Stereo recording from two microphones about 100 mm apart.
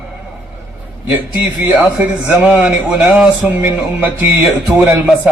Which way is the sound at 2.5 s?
15° right (ahead or behind).